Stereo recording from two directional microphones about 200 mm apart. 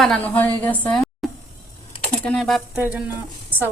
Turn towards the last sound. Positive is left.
turn(degrees=-10)  # may be behind; listen again after turning